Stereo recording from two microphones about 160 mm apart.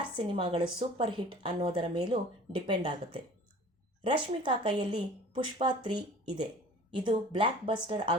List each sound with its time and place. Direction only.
0.3 s a woman's voice: 30° right (ahead or behind)